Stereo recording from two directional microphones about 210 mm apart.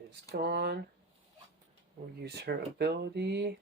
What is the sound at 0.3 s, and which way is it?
Speech, 50° right (ahead or behind).